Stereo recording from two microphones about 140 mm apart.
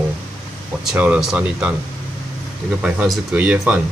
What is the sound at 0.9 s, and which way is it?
Speech, 10° right (ahead or behind).